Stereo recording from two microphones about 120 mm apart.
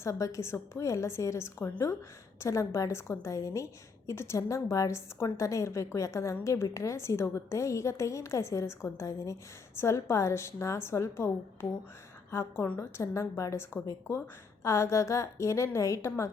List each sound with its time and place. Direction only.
0.0 s a woman's voice: 25° left (ahead or behind)
13.0 s a woman's voice: 25° left (ahead or behind)